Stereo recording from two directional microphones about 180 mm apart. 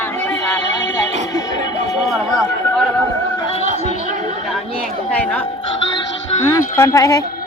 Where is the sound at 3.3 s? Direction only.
30° left (ahead or behind).